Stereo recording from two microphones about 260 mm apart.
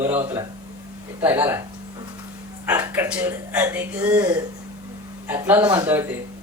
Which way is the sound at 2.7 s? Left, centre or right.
Centre.